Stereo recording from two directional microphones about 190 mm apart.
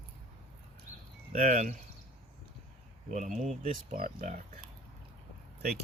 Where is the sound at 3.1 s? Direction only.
40° right (ahead or behind).